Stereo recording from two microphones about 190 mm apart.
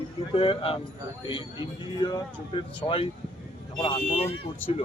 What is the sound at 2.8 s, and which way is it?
Speech, 25° left (ahead or behind).